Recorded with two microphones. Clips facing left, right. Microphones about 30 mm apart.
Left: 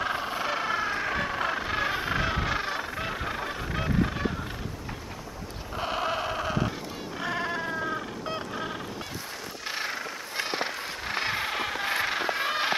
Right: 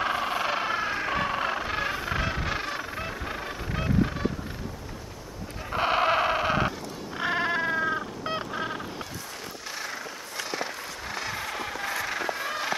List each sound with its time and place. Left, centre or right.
0.0 s vehicle: centre
1.9 s music: centre
3.0 s music: centre
3.3 s honk: centre
5.7 s sheep: right
7.2 s goat: right
9.7 s vehicle: left
10.3 s a sound: left